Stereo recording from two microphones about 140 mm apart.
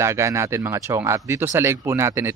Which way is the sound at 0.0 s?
20° right (ahead or behind).